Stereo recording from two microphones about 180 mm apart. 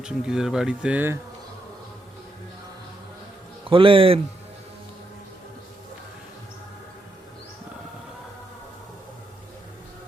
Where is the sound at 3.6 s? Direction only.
30° right (ahead or behind).